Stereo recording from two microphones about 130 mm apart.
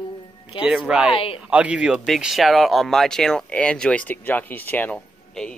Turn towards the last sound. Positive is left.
turn(degrees=10)  # may be behind; listen again after turning